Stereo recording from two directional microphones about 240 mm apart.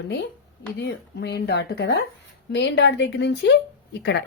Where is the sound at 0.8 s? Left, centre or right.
Left.